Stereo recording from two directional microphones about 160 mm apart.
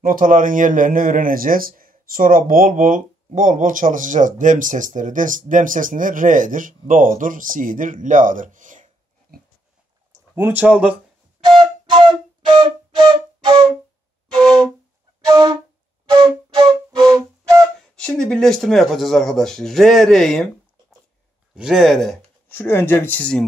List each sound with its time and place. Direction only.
0.0 s speech: 60° right (ahead or behind)
9.3 s dog: 65° right (ahead or behind)
10.3 s speech: 15° right (ahead or behind)
11.4 s flute: 30° right (ahead or behind)
14.3 s flute: 5° left (ahead or behind)
15.3 s music: 25° right (ahead or behind)
17.7 s speech: 5° left (ahead or behind)
21.5 s speech: 5° right (ahead or behind)